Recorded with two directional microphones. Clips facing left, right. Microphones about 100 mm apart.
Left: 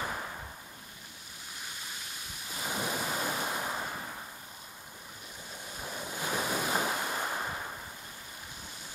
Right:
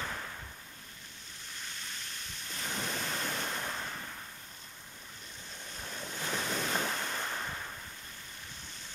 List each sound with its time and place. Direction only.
0.0 s a sound: 20° left (ahead or behind)
1.6 s thunder: 10° left (ahead or behind)
5.7 s waves: 10° left (ahead or behind)